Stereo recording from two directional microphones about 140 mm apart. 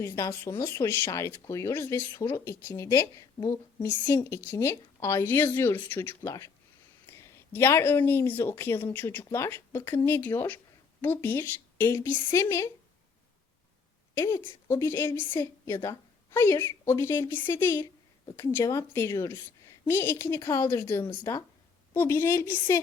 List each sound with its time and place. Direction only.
0.0 s speech: 20° left (ahead or behind)
14.2 s a woman's voice: 20° left (ahead or behind)